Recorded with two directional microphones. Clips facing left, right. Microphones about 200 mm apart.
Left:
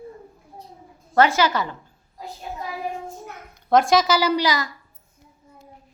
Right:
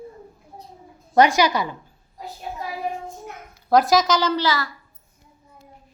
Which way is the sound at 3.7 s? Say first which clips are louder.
Even; centre (ahead or behind).